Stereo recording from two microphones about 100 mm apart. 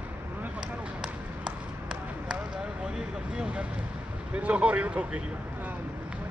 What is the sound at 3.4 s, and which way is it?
Speech, 10° right (ahead or behind).